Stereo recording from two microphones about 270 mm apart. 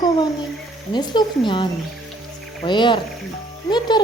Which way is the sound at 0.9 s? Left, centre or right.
Centre.